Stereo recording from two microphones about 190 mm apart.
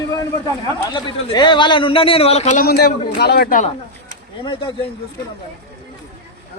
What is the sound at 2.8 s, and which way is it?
Speech, 55° left (ahead or behind).